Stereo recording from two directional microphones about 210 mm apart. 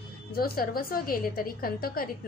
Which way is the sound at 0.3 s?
45° left (ahead or behind).